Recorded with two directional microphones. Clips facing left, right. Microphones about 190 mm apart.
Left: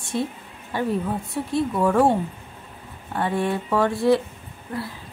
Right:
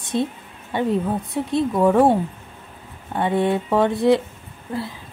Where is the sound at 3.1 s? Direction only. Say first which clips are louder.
Right 4 dB; 20° right (ahead or behind).